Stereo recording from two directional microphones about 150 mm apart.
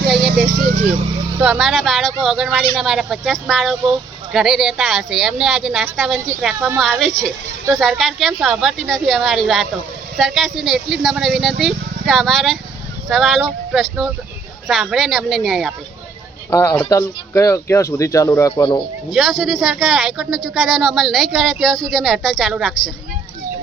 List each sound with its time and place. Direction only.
0.1 s vehicle: 5° right (ahead or behind)
1.5 s speech: centre (ahead or behind)
16.5 s speech: 15° left (ahead or behind)
19.1 s speech: centre (ahead or behind)